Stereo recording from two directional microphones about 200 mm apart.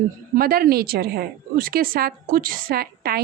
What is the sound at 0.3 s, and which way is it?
A woman's voice, 45° right (ahead or behind).